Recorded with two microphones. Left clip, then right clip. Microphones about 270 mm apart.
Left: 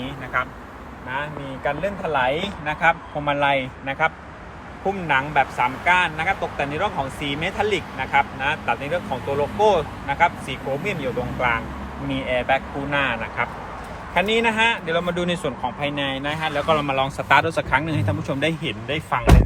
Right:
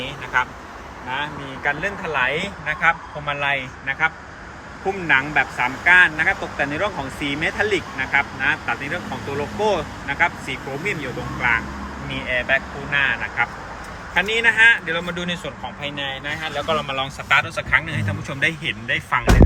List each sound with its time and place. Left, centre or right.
1.1 s speech: centre